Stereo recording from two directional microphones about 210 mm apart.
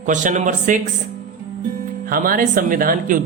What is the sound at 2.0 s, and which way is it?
Speech, 45° right (ahead or behind).